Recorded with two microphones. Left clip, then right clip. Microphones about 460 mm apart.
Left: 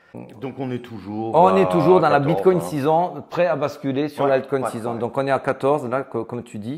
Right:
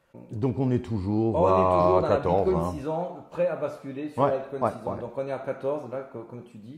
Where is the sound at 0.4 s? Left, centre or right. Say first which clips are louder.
Right 2 dB; centre.